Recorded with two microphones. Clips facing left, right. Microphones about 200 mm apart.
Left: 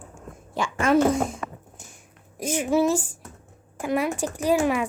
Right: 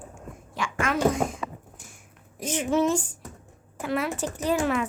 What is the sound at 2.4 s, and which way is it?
A woman's voice, 10° left (ahead or behind).